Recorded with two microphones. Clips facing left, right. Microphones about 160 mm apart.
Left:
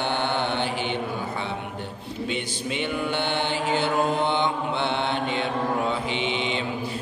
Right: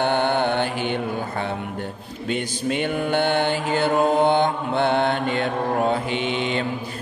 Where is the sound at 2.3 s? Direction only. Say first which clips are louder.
Right 9 dB; 50° right (ahead or behind).